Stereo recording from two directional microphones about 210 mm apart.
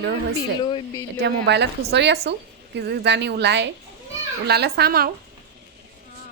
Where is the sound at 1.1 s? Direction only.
50° right (ahead or behind).